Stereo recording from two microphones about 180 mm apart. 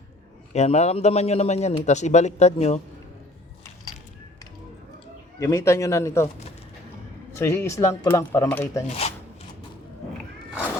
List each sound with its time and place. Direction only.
0.5 s a man's voice: 40° left (ahead or behind)
5.4 s speech: 15° left (ahead or behind)
7.3 s speech: 15° left (ahead or behind)
9.0 s a sound: 35° left (ahead or behind)